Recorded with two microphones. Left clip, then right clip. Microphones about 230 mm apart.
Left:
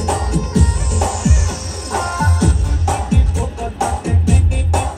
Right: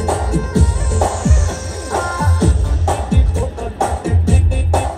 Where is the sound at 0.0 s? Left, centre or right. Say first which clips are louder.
Right 1 dB; left.